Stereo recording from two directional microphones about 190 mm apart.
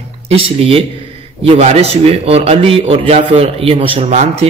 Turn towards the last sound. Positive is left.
turn(degrees=-35)  # may be behind; listen again after turning